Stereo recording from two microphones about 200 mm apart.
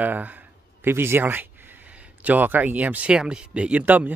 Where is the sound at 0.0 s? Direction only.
10° right (ahead or behind).